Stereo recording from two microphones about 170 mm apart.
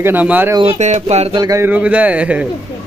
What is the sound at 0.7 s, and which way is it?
Speech, 45° right (ahead or behind).